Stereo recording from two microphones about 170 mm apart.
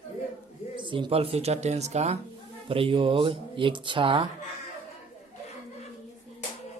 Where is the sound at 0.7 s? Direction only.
30° right (ahead or behind).